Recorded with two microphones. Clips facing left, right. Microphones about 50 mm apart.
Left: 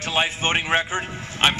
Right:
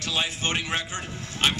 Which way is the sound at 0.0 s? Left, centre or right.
Left.